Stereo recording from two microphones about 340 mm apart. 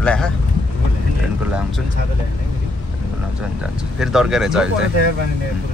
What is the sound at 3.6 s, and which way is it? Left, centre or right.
Speech, centre.